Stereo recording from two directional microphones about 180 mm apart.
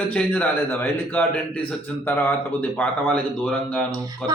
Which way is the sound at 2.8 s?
5° left (ahead or behind).